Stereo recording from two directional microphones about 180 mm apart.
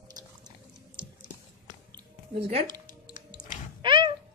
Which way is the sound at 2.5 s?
25° right (ahead or behind).